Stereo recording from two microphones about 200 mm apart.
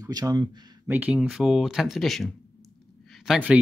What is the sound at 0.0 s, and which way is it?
Speech, 20° right (ahead or behind).